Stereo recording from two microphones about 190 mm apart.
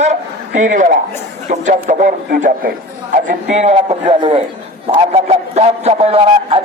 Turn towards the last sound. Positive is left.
turn(degrees=-30)  # may be behind; listen again after turning